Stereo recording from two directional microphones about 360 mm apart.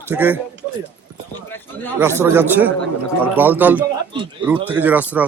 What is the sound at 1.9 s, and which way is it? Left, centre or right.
A man's voice, centre.